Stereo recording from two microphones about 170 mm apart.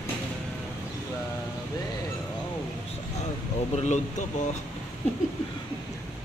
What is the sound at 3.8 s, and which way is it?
Speech, 45° left (ahead or behind).